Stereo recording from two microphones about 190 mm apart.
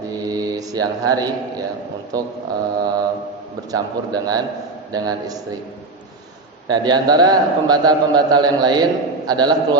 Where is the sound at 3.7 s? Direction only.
20° right (ahead or behind).